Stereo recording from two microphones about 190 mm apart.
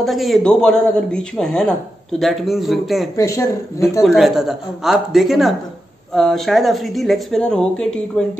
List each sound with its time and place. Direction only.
0.0 s a man's voice: centre (ahead or behind)
3.2 s speech: 15° left (ahead or behind)
4.0 s a man's voice: centre (ahead or behind)